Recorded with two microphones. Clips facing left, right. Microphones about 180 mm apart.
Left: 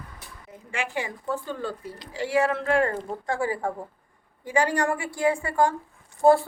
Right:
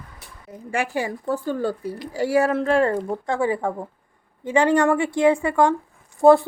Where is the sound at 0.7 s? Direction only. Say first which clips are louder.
Right 6 dB; 40° right (ahead or behind).